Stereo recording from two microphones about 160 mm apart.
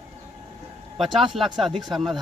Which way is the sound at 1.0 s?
Centre (ahead or behind).